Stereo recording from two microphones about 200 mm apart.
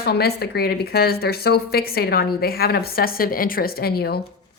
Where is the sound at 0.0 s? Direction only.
50° left (ahead or behind).